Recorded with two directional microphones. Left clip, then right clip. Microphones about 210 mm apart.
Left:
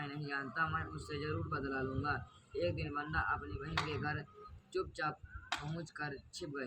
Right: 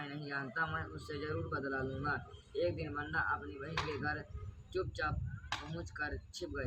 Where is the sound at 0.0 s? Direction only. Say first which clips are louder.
Even; 15° left (ahead or behind).